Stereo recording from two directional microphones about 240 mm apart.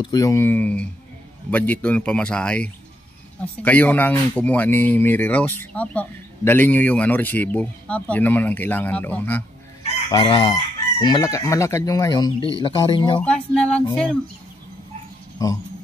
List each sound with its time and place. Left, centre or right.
0.0 s speech: centre
13.2 s a sound: centre
15.4 s speech: centre